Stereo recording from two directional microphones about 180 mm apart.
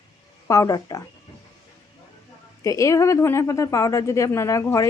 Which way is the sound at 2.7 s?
15° left (ahead or behind).